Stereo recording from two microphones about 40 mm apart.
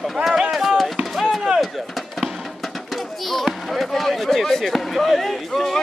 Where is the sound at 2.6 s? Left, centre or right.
Centre.